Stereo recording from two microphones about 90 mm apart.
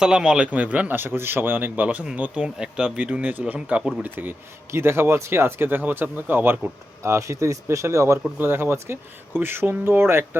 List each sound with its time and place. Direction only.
0.0 s a man's voice: 10° right (ahead or behind)
4.0 s speech: 20° right (ahead or behind)